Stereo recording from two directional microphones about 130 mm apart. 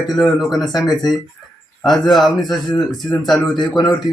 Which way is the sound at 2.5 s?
30° left (ahead or behind).